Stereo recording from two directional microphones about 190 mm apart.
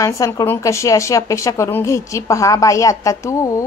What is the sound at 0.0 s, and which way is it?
A woman's voice, 15° left (ahead or behind).